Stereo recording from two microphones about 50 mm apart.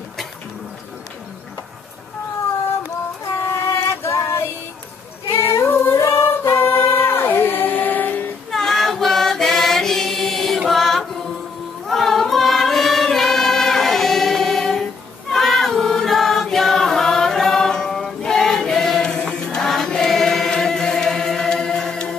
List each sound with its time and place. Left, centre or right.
3.4 s a sound: left
5.3 s female singing: left
5.9 s singing: left
8.5 s choir: centre
10.7 s chant: centre
11.9 s choir: centre
19.9 s chant: centre